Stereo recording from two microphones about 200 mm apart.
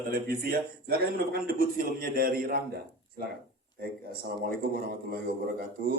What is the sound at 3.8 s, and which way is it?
A man's voice, 50° right (ahead or behind).